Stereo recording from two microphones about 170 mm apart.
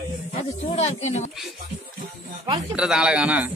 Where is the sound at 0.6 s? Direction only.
40° left (ahead or behind).